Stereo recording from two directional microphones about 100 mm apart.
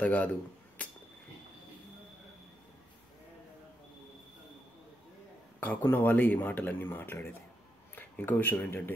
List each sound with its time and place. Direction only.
0.0 s speech: 15° left (ahead or behind)
5.6 s speech: 15° left (ahead or behind)